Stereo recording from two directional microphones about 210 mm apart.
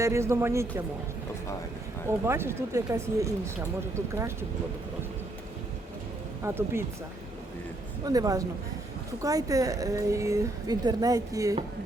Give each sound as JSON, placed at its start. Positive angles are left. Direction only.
{"t": 0.0, "sound": "a woman's voice", "side_deg": -15}
{"t": 2.0, "sound": "a woman's voice", "side_deg": -10}
{"t": 6.4, "sound": "a woman's voice", "side_deg": -10}
{"t": 8.0, "sound": "a woman's voice", "side_deg": -15}